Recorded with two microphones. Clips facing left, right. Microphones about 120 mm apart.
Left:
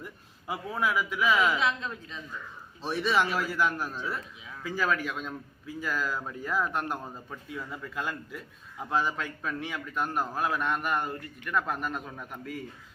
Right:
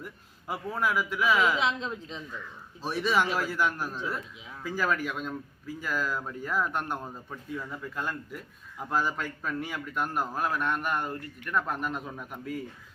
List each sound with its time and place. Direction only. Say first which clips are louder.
0.0 s a man's voice: even; 5° left (ahead or behind)
1.4 s a woman's voice: even; 20° right (ahead or behind)
2.8 s a man's voice: even; 5° right (ahead or behind)